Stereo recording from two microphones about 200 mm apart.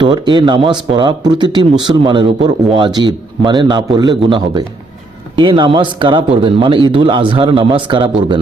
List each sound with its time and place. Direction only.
0.0 s speech: 20° right (ahead or behind)